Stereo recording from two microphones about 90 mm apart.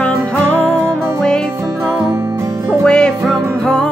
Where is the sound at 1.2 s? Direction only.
10° left (ahead or behind).